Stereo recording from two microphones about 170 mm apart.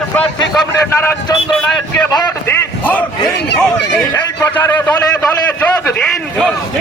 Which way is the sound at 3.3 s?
5° left (ahead or behind).